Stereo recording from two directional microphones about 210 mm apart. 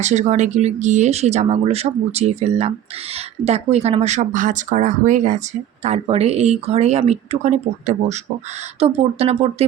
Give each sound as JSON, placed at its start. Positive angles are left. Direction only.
{"t": 0.0, "sound": "speech", "side_deg": -35}